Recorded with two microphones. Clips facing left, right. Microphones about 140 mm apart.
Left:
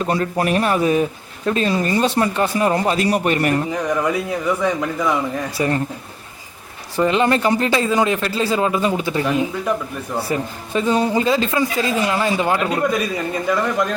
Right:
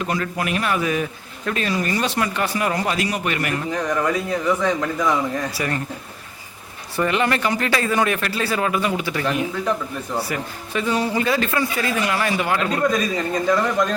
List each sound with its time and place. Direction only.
0.0 s a man's voice: 30° left (ahead or behind)
3.7 s a man's voice: 10° left (ahead or behind)
5.5 s speech: 25° left (ahead or behind)
6.9 s speech: 25° left (ahead or behind)
9.6 s speech: 5° left (ahead or behind)
10.2 s speech: 25° left (ahead or behind)
12.5 s a man's voice: 10° left (ahead or behind)